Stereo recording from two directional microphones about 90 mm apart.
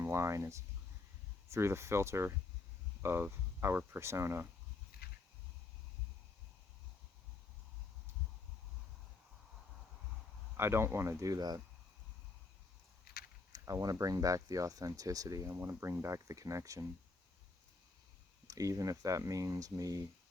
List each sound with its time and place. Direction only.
0.0 s speech: 30° right (ahead or behind)
10.6 s speech: 25° right (ahead or behind); by 11.6 s 45° right (ahead or behind)
13.5 s a sound: 40° right (ahead or behind)
14.0 s speech: 40° right (ahead or behind)
18.4 s speech: 40° right (ahead or behind)